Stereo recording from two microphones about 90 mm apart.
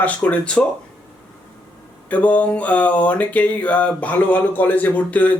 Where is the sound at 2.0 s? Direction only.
15° left (ahead or behind).